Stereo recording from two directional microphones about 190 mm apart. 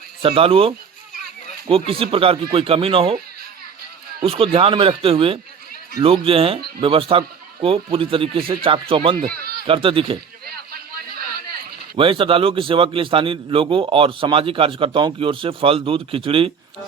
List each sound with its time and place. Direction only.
0.2 s a man's voice: 30° right (ahead or behind)
4.2 s a man's voice: 30° right (ahead or behind)
9.2 s a sound: 55° right (ahead or behind)
9.6 s a man's voice: 30° right (ahead or behind)
11.9 s a man's voice: 30° right (ahead or behind)